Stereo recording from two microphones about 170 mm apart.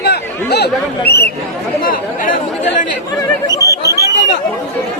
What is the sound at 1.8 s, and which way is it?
Speech, 55° left (ahead or behind).